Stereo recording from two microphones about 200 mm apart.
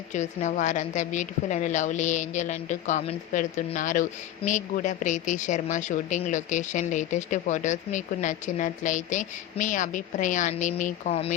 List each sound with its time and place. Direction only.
0.1 s a woman's voice: 35° left (ahead or behind)